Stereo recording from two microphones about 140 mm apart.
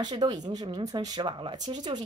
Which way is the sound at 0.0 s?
35° right (ahead or behind).